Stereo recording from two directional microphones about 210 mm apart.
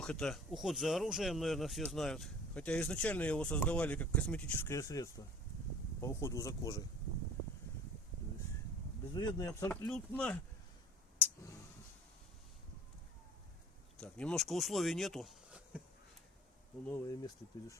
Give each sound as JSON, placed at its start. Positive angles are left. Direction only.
{"t": 0.0, "sound": "speech", "side_deg": 5}
{"t": 9.1, "sound": "speech", "side_deg": 20}
{"t": 14.0, "sound": "speech", "side_deg": 5}
{"t": 16.9, "sound": "speech", "side_deg": 15}